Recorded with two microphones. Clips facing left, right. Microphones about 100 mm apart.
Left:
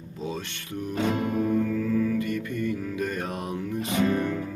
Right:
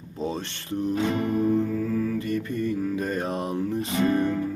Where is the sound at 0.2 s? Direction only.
35° right (ahead or behind).